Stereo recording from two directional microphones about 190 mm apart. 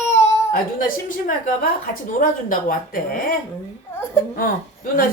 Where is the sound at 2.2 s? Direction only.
45° left (ahead or behind).